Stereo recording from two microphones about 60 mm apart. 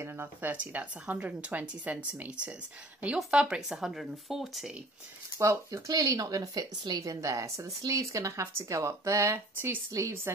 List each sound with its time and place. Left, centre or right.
0.0 s speech: right
0.6 s speech: right; by 4.7 s centre
5.4 s speech: right